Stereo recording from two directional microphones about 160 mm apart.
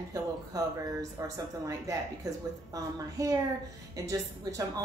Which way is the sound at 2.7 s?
20° right (ahead or behind).